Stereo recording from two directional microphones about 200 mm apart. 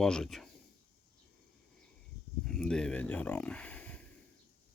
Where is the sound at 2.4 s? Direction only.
5° left (ahead or behind).